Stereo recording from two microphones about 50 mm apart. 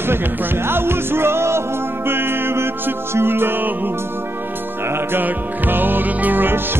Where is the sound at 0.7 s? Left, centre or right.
Right.